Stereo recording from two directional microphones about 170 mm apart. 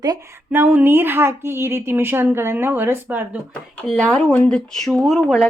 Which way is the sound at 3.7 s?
5° left (ahead or behind).